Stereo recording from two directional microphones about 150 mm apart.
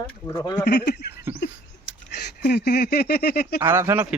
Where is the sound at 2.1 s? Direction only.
90° left.